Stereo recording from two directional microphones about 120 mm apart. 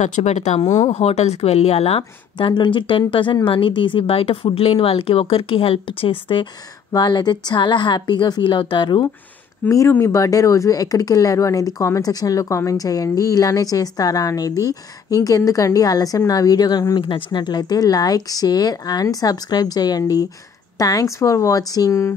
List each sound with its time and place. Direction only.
0.0 s speech: 80° left
0.8 s speech: 60° left (ahead or behind); by 6.4 s 45° left (ahead or behind)
6.9 s speech: 35° left (ahead or behind)
9.7 s speech: 25° left (ahead or behind)